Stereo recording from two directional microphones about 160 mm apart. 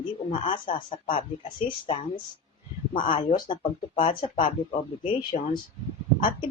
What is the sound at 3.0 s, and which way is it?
Speech, 30° left (ahead or behind).